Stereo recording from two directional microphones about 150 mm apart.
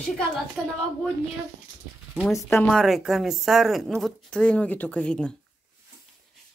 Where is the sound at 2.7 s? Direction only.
Centre (ahead or behind).